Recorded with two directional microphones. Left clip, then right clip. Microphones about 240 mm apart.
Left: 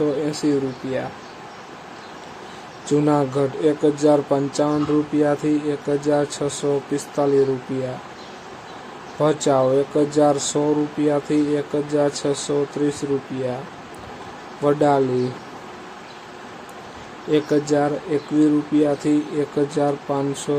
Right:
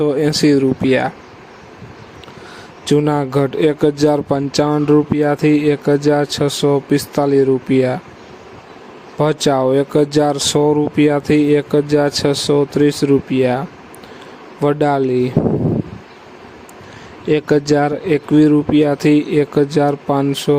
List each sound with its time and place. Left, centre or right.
0.0 s speech: right
2.8 s speech: right
9.1 s speech: right
14.6 s speech: right
17.3 s speech: right